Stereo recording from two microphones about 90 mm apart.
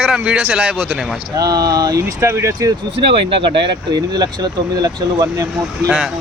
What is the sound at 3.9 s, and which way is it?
Speech, 50° right (ahead or behind).